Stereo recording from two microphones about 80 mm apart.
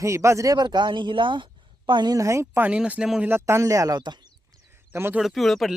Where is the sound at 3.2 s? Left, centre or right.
Right.